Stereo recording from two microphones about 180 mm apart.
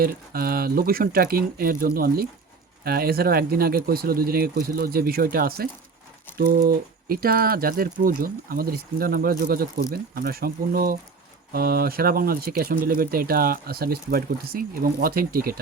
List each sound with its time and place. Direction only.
0.0 s speech: 55° right (ahead or behind)